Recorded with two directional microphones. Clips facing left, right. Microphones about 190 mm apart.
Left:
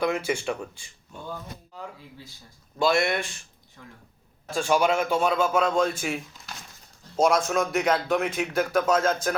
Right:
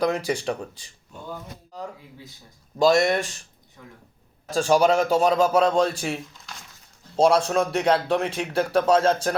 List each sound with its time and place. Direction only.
0.0 s speech: 35° right (ahead or behind)
2.7 s speech: 40° right (ahead or behind)
4.4 s speech: 40° right (ahead or behind)
7.2 s speech: 30° right (ahead or behind)